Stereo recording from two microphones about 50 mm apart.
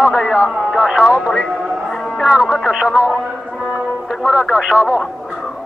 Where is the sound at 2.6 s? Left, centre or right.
Centre.